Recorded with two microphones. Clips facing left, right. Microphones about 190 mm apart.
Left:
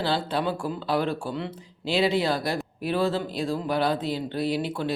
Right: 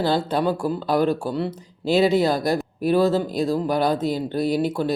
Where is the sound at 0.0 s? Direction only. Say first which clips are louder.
Right 5 dB; 45° right (ahead or behind).